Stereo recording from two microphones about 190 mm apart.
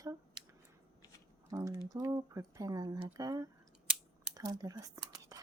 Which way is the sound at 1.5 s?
15° right (ahead or behind).